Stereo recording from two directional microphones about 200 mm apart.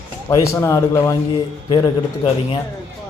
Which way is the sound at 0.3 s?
15° left (ahead or behind).